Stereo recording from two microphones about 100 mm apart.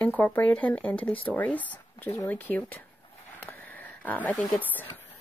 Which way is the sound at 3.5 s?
20° left (ahead or behind).